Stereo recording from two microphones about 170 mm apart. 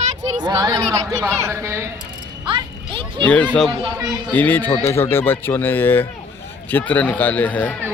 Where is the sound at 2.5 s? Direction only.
30° right (ahead or behind).